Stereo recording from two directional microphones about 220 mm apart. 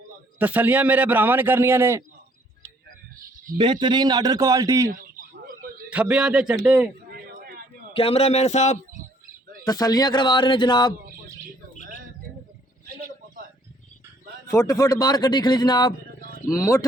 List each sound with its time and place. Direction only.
0.3 s a man's voice: 5° right (ahead or behind)
3.6 s a man's voice: 20° right (ahead or behind)
4.9 s a sound: 40° right (ahead or behind)
5.9 s a man's voice: 5° right (ahead or behind)
7.1 s a sound: 40° right (ahead or behind)
7.9 s speech: 25° left (ahead or behind)
9.6 s speech: 15° left (ahead or behind)
14.5 s speech: 15° left (ahead or behind)